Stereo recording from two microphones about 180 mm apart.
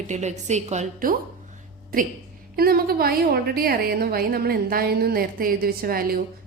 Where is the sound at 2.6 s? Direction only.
55° right (ahead or behind).